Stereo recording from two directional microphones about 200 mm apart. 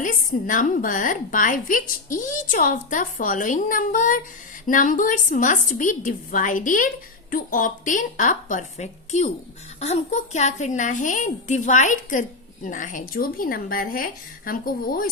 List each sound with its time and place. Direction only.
0.0 s a woman's voice: 40° left (ahead or behind)